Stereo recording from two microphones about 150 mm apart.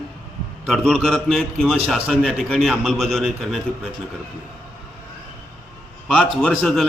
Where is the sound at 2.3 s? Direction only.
5° left (ahead or behind).